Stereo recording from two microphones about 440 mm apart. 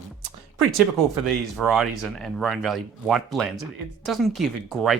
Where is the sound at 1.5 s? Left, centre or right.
Centre.